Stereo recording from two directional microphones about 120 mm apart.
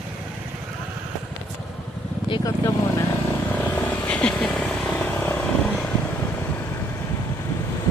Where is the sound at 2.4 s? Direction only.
25° left (ahead or behind).